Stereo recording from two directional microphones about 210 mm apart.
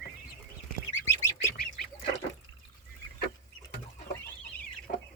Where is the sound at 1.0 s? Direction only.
15° left (ahead or behind).